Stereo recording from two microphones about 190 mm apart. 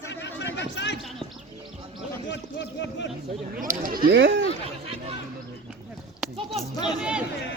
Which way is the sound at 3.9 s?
50° right (ahead or behind).